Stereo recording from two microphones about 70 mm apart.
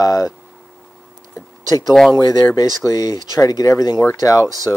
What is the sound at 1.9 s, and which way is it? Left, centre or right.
Speech, centre.